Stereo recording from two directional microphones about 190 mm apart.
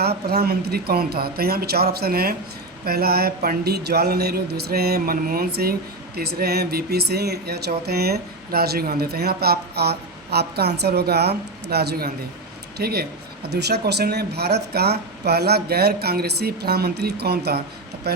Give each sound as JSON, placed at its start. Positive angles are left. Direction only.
{"t": 0.0, "sound": "speech", "side_deg": -55}